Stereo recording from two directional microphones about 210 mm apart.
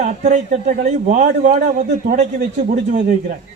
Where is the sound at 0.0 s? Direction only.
35° right (ahead or behind).